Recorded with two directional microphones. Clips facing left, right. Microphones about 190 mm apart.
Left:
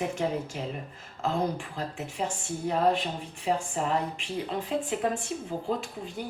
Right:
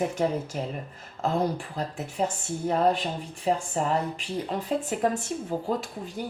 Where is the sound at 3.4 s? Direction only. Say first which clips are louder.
Right 2 dB; 40° right (ahead or behind).